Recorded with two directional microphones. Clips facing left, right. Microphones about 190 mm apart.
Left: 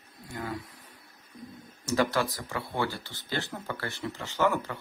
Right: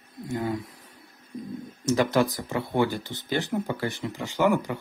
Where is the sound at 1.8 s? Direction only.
20° right (ahead or behind).